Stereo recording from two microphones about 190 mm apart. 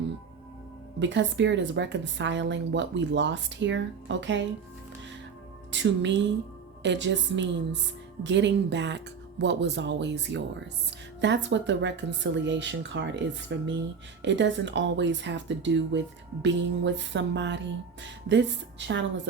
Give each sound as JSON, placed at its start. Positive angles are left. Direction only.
{"t": 0.9, "sound": "a woman's voice", "side_deg": -70}
{"t": 5.7, "sound": "a woman's voice", "side_deg": -70}